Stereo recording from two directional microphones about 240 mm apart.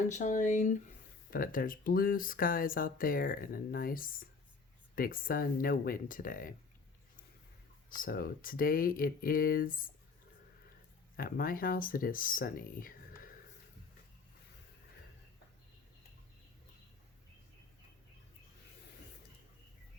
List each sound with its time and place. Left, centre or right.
0.1 s speech: left
7.9 s speech: left
11.2 s speech: left